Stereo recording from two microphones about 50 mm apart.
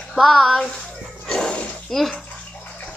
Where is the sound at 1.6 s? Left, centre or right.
Left.